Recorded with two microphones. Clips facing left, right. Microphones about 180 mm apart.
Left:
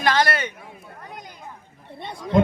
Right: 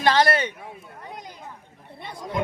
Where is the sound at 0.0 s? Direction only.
30° right (ahead or behind).